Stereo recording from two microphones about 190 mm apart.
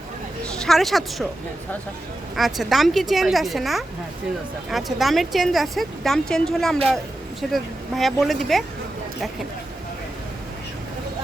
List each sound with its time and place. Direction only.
0.5 s a woman's voice: centre (ahead or behind)
2.3 s speech: centre (ahead or behind)